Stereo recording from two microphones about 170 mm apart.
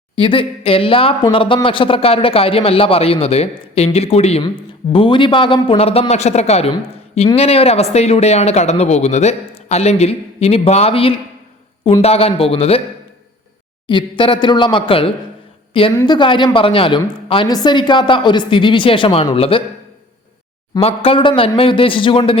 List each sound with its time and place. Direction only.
0.2 s a man's voice: 30° left (ahead or behind)
13.8 s a woman's voice: 30° left (ahead or behind)
15.9 s a woman's voice: 15° left (ahead or behind)
16.1 s a woman's voice: 30° left (ahead or behind)
20.7 s a man's voice: 35° left (ahead or behind)